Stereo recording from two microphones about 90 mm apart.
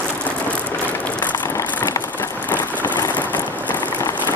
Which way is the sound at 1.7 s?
20° left (ahead or behind).